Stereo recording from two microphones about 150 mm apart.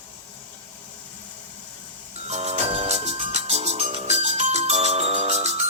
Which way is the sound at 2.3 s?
45° right (ahead or behind).